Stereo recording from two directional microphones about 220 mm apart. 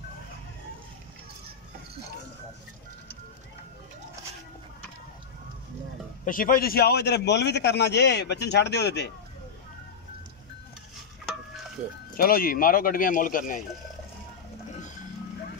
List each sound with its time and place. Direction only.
6.2 s a man's voice: 40° left (ahead or behind)
12.2 s speech: 40° left (ahead or behind)